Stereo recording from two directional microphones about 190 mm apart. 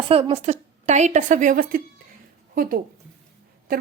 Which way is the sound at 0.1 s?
30° right (ahead or behind).